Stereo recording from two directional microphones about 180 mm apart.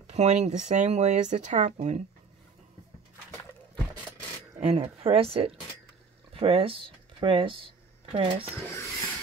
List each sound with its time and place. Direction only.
0.1 s speech: 40° right (ahead or behind)
4.6 s speech: 40° right (ahead or behind)
8.7 s a sound: 15° left (ahead or behind)